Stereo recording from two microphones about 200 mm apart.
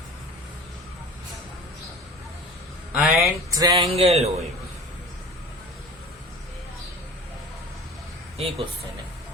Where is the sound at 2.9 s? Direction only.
Centre (ahead or behind).